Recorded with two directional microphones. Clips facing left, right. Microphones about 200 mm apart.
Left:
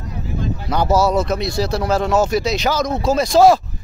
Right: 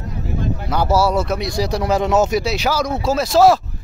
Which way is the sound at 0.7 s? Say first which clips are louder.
Left 1 dB; 5° right (ahead or behind).